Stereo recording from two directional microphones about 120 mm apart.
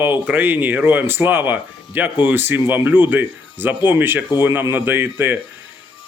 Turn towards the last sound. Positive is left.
turn(degrees=-15)  # may be behind; listen again after turning